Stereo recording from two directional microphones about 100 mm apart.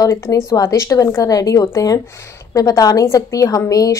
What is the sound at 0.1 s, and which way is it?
A woman's voice, 30° left (ahead or behind).